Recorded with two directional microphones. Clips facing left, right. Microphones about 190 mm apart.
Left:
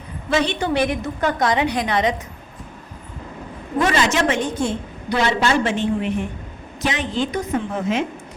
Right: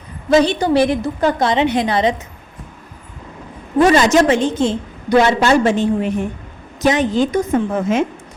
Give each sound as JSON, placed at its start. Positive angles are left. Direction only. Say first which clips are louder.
{"t": 0.3, "sound": "a woman's voice", "louder": "right 7 dB", "side_deg": -40}
{"t": 3.8, "sound": "a woman's voice", "louder": "right 7 dB", "side_deg": -35}
{"t": 4.4, "sound": "a woman's voice", "louder": "right 6 dB", "side_deg": -25}
{"t": 5.0, "sound": "a woman's voice", "louder": "right 7 dB", "side_deg": -45}